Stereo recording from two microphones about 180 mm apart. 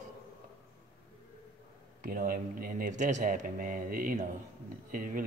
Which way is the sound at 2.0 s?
50° right (ahead or behind).